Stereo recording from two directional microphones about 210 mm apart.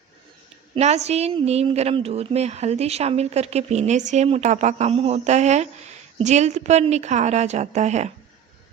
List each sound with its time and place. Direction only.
0.8 s a woman's voice: 30° right (ahead or behind)